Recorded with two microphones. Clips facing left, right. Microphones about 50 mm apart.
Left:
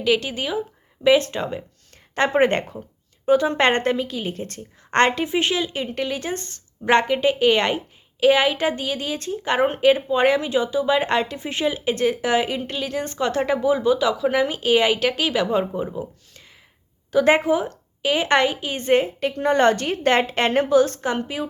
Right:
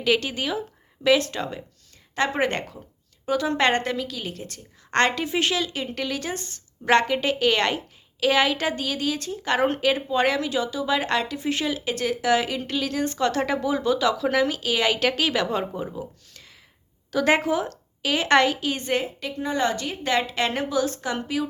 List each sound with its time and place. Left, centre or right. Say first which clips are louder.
0.0 s speech: left 2 dB; centre
2.1 s a woman's voice: left 5 dB; left
6.3 s a woman's voice: left 4 dB; left
6.8 s speech: left 2 dB; centre
14.8 s speech: left 2 dB; centre
18.8 s a woman's voice: left 7 dB; left
19.4 s a woman's voice: left 7 dB; left